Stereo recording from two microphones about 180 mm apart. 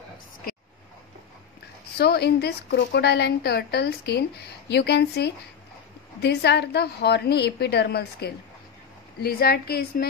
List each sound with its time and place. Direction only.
2.0 s a woman's voice: 65° left (ahead or behind)